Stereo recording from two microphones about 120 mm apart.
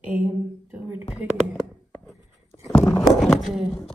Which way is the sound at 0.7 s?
15° right (ahead or behind).